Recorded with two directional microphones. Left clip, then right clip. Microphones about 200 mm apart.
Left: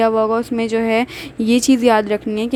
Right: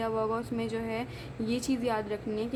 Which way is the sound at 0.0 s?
40° left (ahead or behind).